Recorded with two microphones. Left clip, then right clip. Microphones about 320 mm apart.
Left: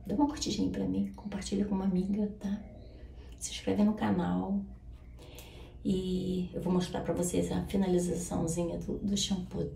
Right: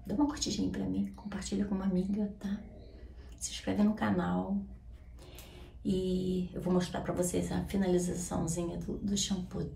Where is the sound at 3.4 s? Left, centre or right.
Centre.